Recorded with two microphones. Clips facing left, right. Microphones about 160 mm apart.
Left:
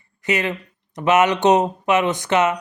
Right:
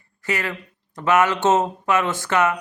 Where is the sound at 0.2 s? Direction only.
20° left (ahead or behind).